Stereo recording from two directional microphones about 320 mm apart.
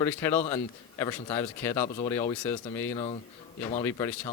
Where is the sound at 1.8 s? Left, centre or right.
Left.